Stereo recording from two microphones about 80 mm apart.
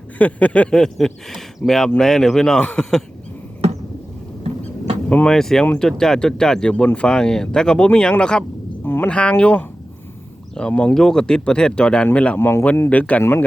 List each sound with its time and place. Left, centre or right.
0.2 s speech: centre
5.0 s speech: centre
8.8 s a sound: left
9.0 s speech: centre
12.4 s speech: left